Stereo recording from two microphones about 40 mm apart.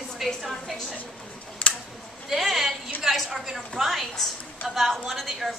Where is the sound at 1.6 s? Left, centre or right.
Left.